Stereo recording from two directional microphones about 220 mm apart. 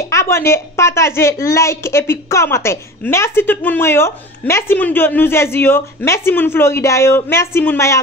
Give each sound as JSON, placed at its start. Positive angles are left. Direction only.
{"t": 0.1, "sound": "a woman's voice", "side_deg": 10}